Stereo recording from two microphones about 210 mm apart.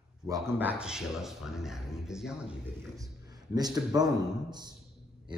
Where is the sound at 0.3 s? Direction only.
10° right (ahead or behind).